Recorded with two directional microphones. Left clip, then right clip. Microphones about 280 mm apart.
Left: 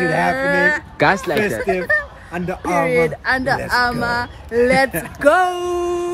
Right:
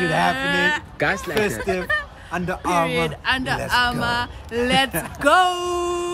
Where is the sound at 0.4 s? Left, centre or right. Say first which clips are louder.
Left 4 dB; centre.